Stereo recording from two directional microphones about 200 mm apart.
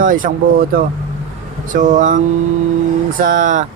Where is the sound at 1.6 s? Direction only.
40° right (ahead or behind).